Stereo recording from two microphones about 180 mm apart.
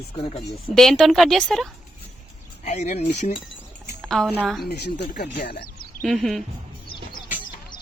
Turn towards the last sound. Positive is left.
turn(degrees=0)  # may be behind; listen again after turning